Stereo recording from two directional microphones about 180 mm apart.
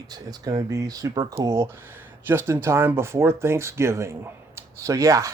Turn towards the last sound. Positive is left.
turn(degrees=-15)  # may be behind; listen again after turning